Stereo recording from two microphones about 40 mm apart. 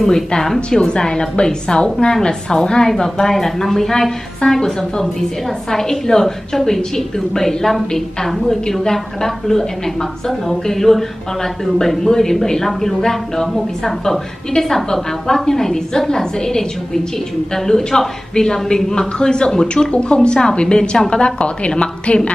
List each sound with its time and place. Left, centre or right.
0.0 s a woman's voice: centre
0.6 s a woman's voice: left